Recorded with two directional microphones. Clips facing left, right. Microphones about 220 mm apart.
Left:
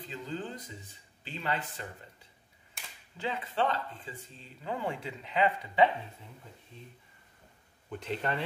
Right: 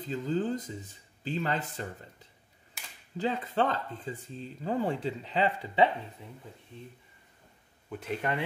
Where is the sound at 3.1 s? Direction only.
40° right (ahead or behind).